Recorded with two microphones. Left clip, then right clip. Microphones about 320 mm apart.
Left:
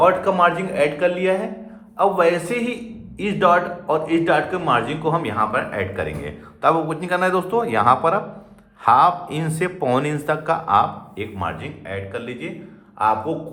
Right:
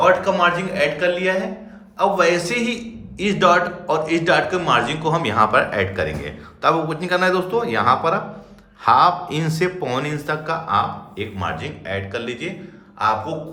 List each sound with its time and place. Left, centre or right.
0.0 s a man's voice: centre
13.0 s speech: centre